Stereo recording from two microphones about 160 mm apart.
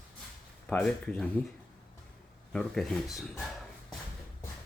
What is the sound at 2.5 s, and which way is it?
Speech, centre (ahead or behind).